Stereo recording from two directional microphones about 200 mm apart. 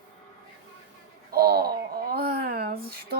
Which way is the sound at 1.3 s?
50° right (ahead or behind).